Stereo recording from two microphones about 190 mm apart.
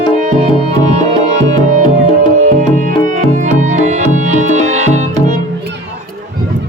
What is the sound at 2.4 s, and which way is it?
Music, 45° right (ahead or behind).